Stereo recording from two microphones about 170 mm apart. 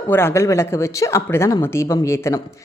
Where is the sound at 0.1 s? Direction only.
15° left (ahead or behind).